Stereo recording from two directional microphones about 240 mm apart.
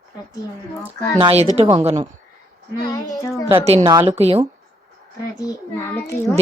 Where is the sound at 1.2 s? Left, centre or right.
Right.